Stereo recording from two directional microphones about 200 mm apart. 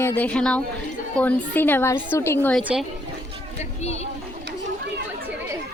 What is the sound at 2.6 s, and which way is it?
Speech, 5° right (ahead or behind).